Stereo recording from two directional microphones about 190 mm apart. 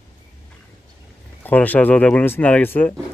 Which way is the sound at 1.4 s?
10° left (ahead or behind).